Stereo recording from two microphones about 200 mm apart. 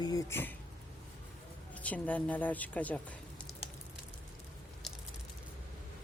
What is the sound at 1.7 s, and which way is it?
Speech, 5° left (ahead or behind).